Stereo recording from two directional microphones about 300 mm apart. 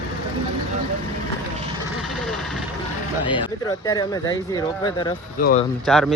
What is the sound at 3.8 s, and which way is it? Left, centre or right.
Speech, centre.